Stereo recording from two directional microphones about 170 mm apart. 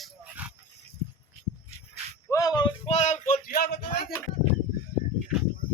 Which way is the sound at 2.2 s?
20° left (ahead or behind).